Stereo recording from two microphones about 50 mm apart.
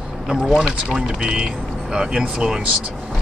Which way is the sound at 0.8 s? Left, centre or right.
Centre.